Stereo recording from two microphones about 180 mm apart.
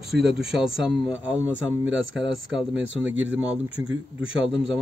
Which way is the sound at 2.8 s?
90° right.